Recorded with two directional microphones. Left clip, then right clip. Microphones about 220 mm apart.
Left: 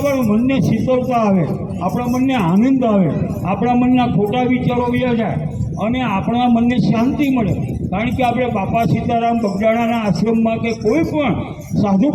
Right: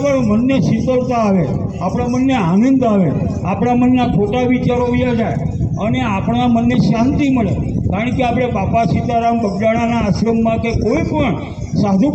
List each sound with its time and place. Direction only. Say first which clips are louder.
0.0 s a man's voice: right 2 dB; 25° right (ahead or behind)